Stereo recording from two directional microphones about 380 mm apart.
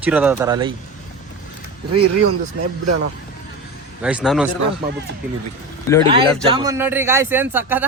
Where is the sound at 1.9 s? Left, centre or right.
Right.